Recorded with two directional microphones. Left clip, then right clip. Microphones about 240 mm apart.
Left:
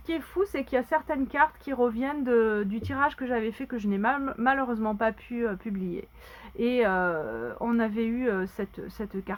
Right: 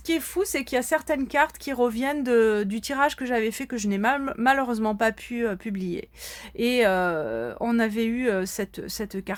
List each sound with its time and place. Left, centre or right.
0.5 s speech: right